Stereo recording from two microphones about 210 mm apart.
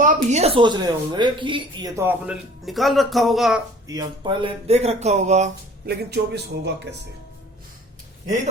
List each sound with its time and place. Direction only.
0.0 s speech: 35° right (ahead or behind); by 3.6 s centre (ahead or behind)
3.8 s speech: 15° right (ahead or behind); by 5.5 s 35° right (ahead or behind)
5.8 s a man's voice: 50° right (ahead or behind)